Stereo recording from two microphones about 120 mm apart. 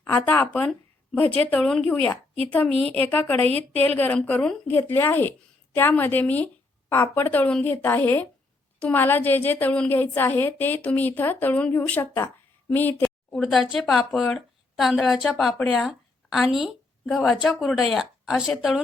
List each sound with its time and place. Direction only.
0.0 s a woman's voice: 15° left (ahead or behind)
13.4 s a woman's voice: centre (ahead or behind)